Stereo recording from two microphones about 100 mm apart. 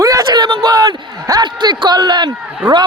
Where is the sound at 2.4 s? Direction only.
10° right (ahead or behind).